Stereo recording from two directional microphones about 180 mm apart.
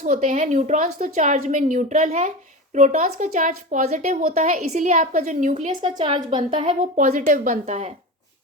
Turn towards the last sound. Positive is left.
turn(degrees=-40)  # may be behind; listen again after turning